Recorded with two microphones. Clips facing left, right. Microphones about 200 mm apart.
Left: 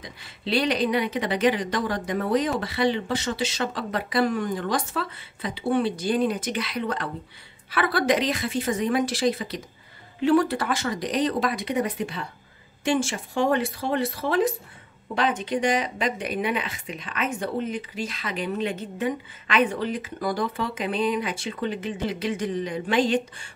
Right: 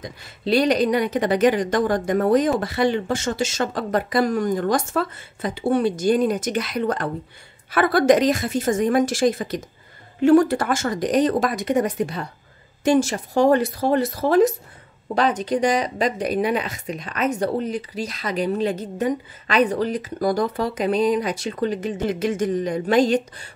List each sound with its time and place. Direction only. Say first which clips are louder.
0.0 s speech: right 6 dB; 45° right (ahead or behind)